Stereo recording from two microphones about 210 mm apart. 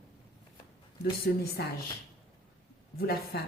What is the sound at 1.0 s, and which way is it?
Speech, 50° left (ahead or behind).